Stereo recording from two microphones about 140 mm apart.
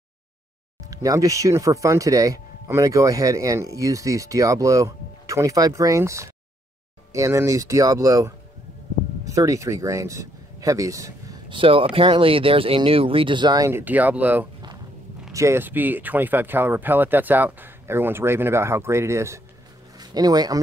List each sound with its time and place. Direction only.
0.8 s speech: 25° right (ahead or behind)
11.4 s speech: 40° right (ahead or behind)
13.7 s a man's voice: 15° right (ahead or behind)